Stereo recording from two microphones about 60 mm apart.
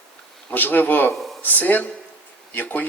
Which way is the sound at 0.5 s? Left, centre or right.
Left.